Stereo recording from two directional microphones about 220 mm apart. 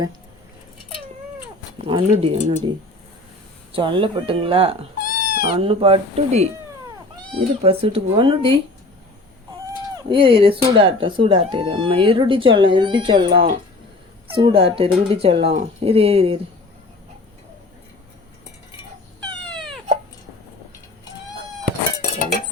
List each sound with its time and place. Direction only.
1.9 s speech: 25° right (ahead or behind)
4.9 s bleat: 40° left (ahead or behind)
5.5 s speech: 25° right (ahead or behind)
9.9 s speech: 20° right (ahead or behind)
19.5 s cat: centre (ahead or behind)